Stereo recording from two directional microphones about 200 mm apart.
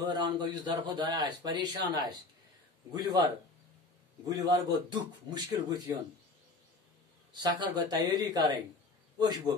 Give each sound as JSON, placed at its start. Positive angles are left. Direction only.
{"t": 0.0, "sound": "a man's voice", "side_deg": -20}
{"t": 4.3, "sound": "a man's voice", "side_deg": -20}
{"t": 7.3, "sound": "a man's voice", "side_deg": -20}